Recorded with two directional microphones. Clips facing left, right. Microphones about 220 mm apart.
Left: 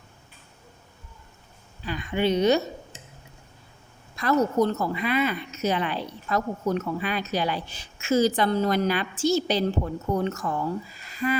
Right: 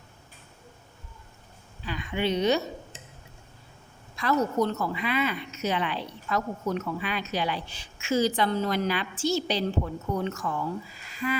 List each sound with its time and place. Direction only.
1.8 s a woman's voice: 45° left (ahead or behind)
4.1 s a woman's voice: 45° left (ahead or behind)